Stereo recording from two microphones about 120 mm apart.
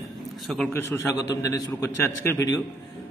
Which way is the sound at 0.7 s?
20° left (ahead or behind).